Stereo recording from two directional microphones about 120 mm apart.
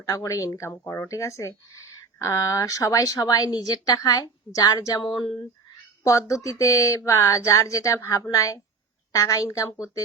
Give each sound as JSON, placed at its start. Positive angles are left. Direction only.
{"t": 0.0, "sound": "speech", "side_deg": 30}
{"t": 6.0, "sound": "speech", "side_deg": 25}